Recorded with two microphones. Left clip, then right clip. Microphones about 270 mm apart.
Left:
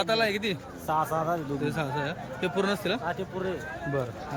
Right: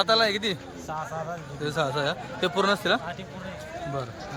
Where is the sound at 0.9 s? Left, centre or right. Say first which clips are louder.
Left 7 dB; left.